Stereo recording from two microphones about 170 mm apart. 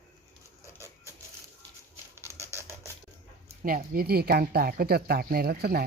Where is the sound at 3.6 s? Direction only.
55° right (ahead or behind).